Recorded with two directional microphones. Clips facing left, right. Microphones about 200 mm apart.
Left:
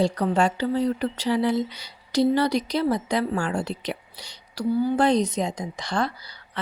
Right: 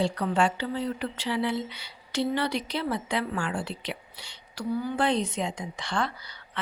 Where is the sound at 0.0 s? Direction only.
40° left (ahead or behind).